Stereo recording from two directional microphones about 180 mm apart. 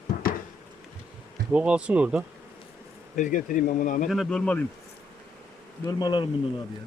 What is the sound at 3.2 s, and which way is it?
Speech, 45° left (ahead or behind).